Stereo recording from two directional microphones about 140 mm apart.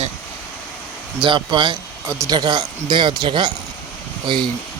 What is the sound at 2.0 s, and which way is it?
Speech, 20° right (ahead or behind).